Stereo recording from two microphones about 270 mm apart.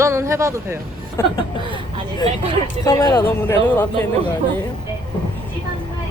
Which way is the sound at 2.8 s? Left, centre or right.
Centre.